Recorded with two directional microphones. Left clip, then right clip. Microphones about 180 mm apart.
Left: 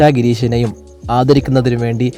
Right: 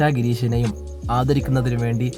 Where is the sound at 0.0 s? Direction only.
35° left (ahead or behind).